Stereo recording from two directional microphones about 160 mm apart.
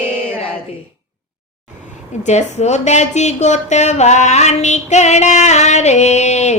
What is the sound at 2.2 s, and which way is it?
Speech, 45° left (ahead or behind).